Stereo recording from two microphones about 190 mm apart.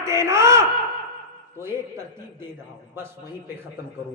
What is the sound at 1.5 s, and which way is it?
Speech, 15° right (ahead or behind).